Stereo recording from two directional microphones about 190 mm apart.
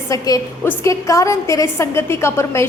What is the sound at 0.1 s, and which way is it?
A woman's voice, 15° left (ahead or behind).